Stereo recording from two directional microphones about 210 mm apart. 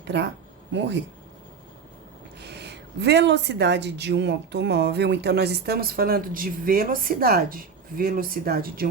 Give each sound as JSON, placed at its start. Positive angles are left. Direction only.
{"t": 0.0, "sound": "speech", "side_deg": -55}
{"t": 2.4, "sound": "speech", "side_deg": -50}